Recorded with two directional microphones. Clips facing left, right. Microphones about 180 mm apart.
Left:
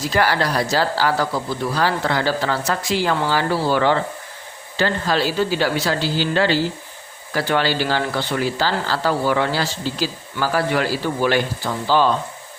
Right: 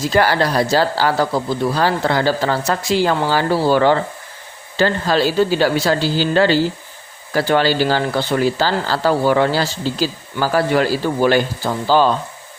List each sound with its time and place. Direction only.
0.1 s speech: 30° right (ahead or behind)